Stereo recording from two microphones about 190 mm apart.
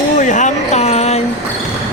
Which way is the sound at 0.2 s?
40° left (ahead or behind).